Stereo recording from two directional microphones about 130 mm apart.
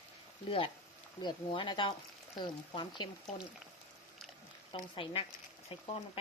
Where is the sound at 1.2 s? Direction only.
35° left (ahead or behind).